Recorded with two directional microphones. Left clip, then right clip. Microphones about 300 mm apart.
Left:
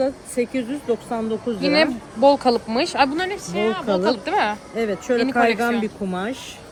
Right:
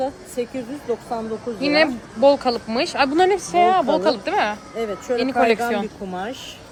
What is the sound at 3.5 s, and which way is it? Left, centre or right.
Speech, centre.